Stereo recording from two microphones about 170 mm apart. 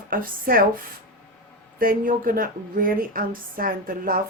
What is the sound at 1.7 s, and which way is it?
A woman's voice, 55° right (ahead or behind).